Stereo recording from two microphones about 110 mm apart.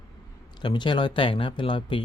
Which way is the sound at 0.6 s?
45° left (ahead or behind).